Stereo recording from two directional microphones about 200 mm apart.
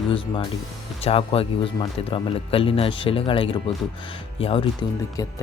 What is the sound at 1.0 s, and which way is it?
Speech, 30° left (ahead or behind).